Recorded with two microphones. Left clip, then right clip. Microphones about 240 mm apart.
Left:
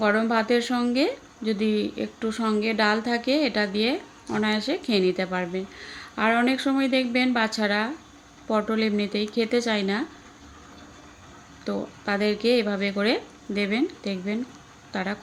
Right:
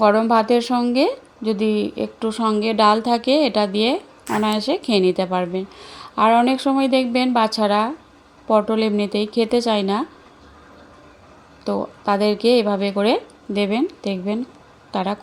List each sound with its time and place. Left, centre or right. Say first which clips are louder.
0.0 s speech: right 7 dB; centre
11.6 s speech: right 8 dB; centre